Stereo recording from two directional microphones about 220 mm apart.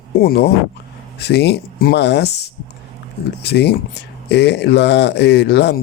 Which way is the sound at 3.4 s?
50° left (ahead or behind).